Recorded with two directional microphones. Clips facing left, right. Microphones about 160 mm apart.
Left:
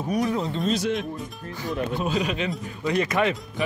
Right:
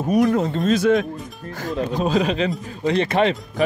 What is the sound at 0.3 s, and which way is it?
Speech, 50° right (ahead or behind).